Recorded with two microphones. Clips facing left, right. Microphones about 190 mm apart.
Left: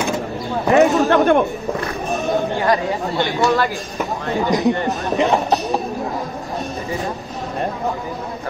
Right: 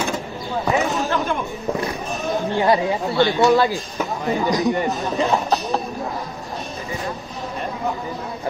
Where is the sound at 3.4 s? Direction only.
20° right (ahead or behind).